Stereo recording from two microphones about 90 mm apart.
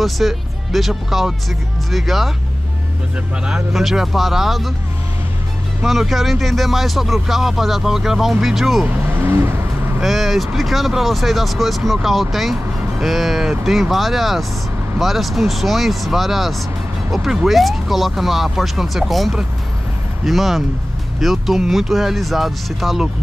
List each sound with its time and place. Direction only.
0.0 s speech: centre (ahead or behind)
3.4 s speech: 5° right (ahead or behind)
5.8 s speech: centre (ahead or behind)
8.8 s vehicle: 25° right (ahead or behind)
10.0 s speech: centre (ahead or behind)